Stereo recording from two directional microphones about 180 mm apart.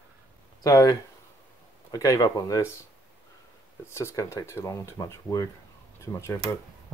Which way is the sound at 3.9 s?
15° left (ahead or behind).